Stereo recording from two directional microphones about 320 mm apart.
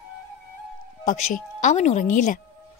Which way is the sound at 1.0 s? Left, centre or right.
Left.